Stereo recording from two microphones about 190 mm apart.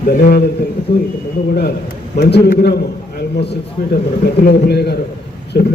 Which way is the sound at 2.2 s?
60° left (ahead or behind).